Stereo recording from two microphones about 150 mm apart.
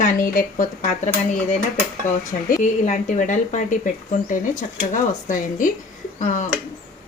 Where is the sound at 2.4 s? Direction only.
55° left (ahead or behind).